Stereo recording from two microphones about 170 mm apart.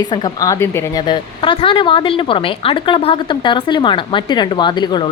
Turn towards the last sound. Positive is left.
turn(degrees=25)  # may be behind; listen again after turning